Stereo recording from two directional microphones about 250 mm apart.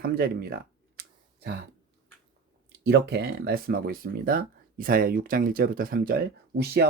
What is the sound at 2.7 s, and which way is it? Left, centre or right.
Speech, right.